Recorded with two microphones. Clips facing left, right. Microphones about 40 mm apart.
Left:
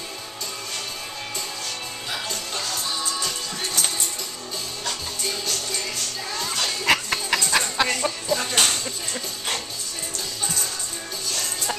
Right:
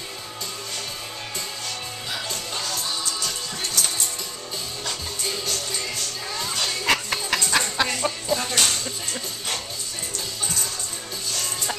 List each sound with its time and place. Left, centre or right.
2.1 s music: centre
4.8 s music: centre
6.3 s a sound: centre
8.4 s music: centre
8.8 s music: centre